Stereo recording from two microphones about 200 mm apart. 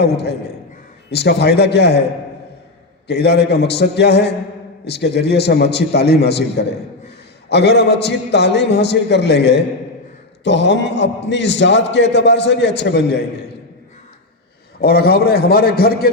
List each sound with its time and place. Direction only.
0.0 s a man's voice: 55° left (ahead or behind)
3.1 s a man's voice: 55° left (ahead or behind)
14.8 s a man's voice: 50° left (ahead or behind)